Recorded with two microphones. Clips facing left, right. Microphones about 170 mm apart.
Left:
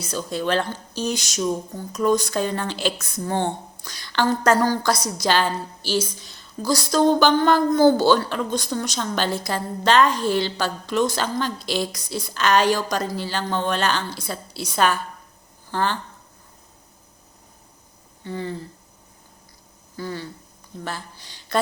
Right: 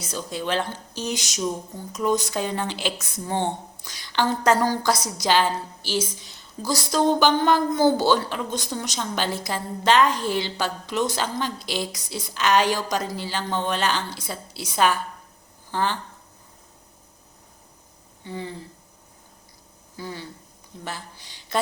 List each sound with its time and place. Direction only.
0.0 s a woman's voice: 15° right (ahead or behind)
18.2 s speech: 15° right (ahead or behind)
20.0 s a woman's voice: 15° right (ahead or behind)